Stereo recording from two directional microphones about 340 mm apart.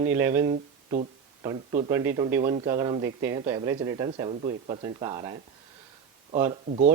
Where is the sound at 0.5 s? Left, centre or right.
Right.